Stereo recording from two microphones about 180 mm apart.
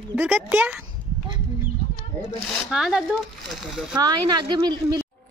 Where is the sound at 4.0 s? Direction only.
25° right (ahead or behind).